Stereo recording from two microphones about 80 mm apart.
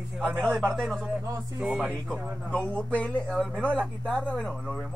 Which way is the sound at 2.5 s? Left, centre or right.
Centre.